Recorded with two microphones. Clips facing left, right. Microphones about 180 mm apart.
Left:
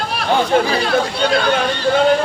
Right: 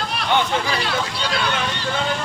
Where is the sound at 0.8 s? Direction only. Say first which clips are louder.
Left 8 dB; 50° left (ahead or behind).